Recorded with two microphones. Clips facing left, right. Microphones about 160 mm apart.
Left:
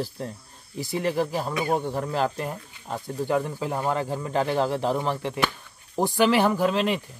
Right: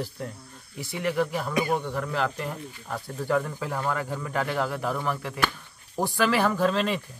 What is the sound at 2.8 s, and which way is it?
Speech, 20° left (ahead or behind).